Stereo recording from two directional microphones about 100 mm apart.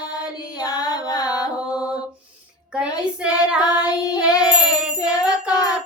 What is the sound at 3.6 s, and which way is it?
Child singing, 40° left (ahead or behind).